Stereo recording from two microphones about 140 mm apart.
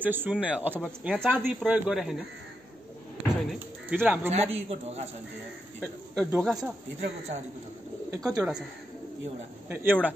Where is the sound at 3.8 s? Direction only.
10° right (ahead or behind).